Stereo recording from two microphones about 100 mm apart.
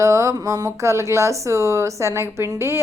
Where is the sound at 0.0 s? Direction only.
30° right (ahead or behind).